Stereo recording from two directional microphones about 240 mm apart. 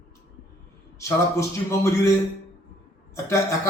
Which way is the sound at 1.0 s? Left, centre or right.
Centre.